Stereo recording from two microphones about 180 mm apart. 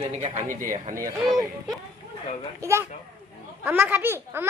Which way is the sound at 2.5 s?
15° right (ahead or behind).